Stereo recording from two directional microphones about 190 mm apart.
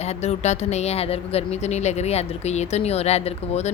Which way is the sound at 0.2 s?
35° left (ahead or behind).